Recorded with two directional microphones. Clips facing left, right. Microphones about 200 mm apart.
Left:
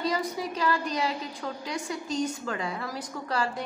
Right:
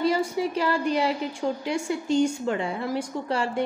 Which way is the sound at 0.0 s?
30° right (ahead or behind).